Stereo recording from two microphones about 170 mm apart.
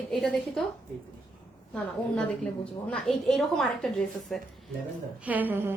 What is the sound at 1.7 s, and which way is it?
A woman's voice, 5° left (ahead or behind).